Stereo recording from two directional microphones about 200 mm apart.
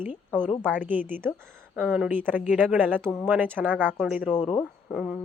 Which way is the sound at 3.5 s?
10° right (ahead or behind).